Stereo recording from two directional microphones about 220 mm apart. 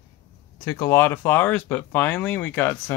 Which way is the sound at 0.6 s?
15° left (ahead or behind).